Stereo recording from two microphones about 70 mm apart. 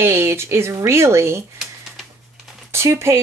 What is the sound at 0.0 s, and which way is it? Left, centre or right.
Speech, right.